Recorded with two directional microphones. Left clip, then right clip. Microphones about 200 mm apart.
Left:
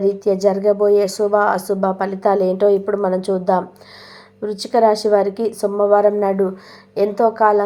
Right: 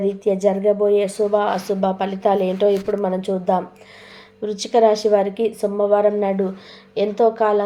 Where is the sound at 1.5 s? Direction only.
30° left (ahead or behind).